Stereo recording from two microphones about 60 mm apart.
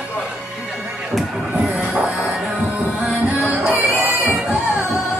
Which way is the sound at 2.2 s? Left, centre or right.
Centre.